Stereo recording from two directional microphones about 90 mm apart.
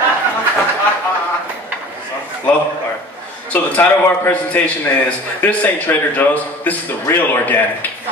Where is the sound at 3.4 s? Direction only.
20° left (ahead or behind).